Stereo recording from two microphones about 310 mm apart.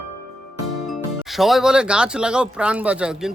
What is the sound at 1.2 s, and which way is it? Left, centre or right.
Speech, centre.